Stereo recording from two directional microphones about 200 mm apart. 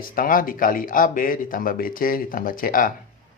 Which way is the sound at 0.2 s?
45° left (ahead or behind).